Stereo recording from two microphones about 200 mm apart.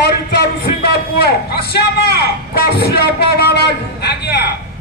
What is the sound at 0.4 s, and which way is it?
A man's voice, 55° left (ahead or behind).